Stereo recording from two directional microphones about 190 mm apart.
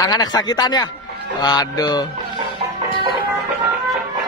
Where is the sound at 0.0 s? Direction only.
20° left (ahead or behind).